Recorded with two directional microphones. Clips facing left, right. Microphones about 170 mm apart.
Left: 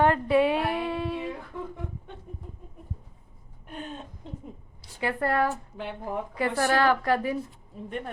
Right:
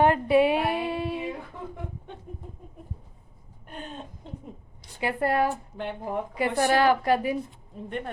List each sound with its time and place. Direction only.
0.0 s a sound: 15° right (ahead or behind)
3.7 s a woman's voice: centre (ahead or behind)
4.9 s a woman's voice: 15° right (ahead or behind)
5.7 s speech: 5° left (ahead or behind)
6.6 s a woman's voice: 15° right (ahead or behind)
7.4 s a woman's voice: centre (ahead or behind)